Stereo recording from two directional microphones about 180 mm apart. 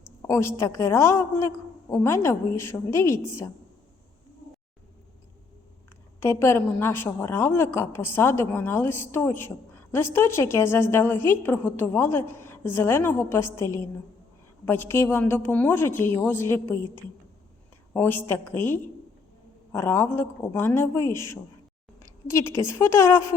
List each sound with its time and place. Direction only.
0.2 s a woman's voice: 15° left (ahead or behind)
6.1 s a woman's voice: 15° left (ahead or behind)